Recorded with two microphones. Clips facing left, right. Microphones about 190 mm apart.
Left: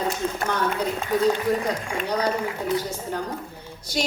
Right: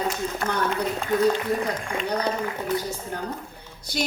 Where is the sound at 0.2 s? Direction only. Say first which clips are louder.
Left 3 dB; 65° left (ahead or behind).